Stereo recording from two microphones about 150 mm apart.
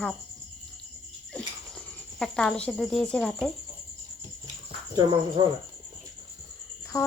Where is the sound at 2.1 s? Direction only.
5° left (ahead or behind).